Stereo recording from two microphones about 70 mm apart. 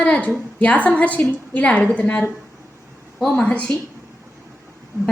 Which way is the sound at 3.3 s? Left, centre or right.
Centre.